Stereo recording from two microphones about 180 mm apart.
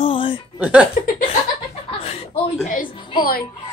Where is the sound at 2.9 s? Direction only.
25° left (ahead or behind).